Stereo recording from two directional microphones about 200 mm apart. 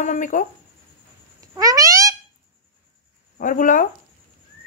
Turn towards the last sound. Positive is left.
turn(degrees=40)  # may be behind; listen again after turning